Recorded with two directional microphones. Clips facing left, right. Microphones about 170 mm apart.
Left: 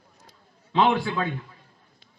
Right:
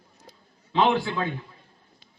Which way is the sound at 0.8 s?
55° left (ahead or behind).